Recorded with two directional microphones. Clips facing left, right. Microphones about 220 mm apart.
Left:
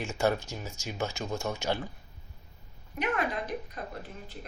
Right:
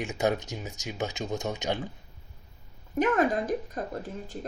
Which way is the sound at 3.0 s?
45° right (ahead or behind).